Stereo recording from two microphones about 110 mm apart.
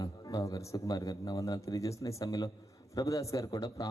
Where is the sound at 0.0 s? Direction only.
30° left (ahead or behind).